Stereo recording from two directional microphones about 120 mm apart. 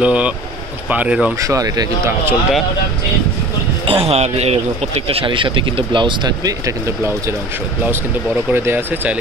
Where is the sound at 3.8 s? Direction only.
50° right (ahead or behind); by 7.1 s 30° right (ahead or behind).